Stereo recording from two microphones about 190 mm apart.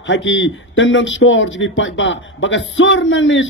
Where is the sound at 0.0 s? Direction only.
80° left.